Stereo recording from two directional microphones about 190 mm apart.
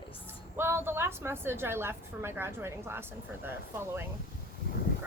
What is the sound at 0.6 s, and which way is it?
A woman's voice, 10° right (ahead or behind).